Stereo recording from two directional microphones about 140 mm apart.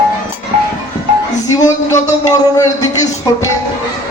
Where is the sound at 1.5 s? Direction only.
25° left (ahead or behind).